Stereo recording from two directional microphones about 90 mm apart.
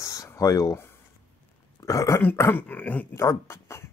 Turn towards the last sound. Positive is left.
turn(degrees=30)  # may be behind; listen again after turning